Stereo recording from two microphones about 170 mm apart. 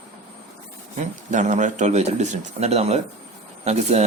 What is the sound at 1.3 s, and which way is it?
Speech, 45° right (ahead or behind).